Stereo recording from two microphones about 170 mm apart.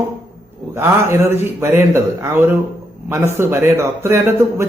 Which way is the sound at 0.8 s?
15° right (ahead or behind).